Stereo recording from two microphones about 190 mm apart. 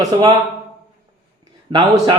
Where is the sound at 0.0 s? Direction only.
20° right (ahead or behind).